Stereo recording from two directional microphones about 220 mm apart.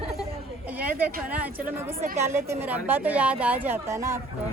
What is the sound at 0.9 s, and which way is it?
A woman's voice, 5° right (ahead or behind).